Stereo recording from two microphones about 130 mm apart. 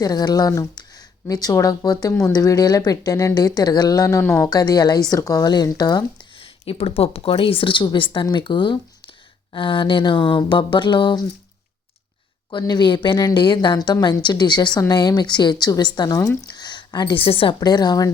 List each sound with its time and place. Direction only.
0.0 s a woman's voice: 30° left (ahead or behind)
6.4 s a woman's voice: 50° left (ahead or behind)
12.5 s a woman's voice: 35° left (ahead or behind)